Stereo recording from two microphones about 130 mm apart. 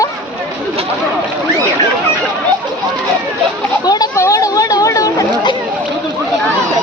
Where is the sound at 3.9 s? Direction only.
25° left (ahead or behind).